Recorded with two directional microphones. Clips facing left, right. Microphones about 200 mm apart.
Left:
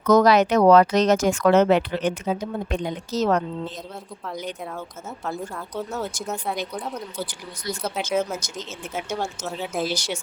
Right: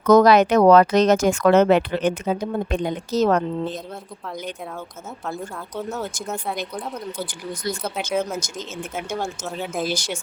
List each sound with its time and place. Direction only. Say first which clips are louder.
0.0 s speech: right 3 dB; 55° right (ahead or behind)
5.2 s speech: even; centre (ahead or behind)
7.3 s speech: right 4 dB; 50° right (ahead or behind)
7.8 s speech: left 3 dB; centre (ahead or behind)
8.4 s speech: right 4 dB; 50° right (ahead or behind)
9.1 s speech: right 2 dB; centre (ahead or behind)